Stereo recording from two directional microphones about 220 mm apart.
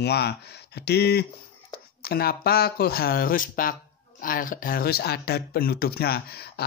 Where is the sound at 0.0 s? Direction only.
50° left (ahead or behind).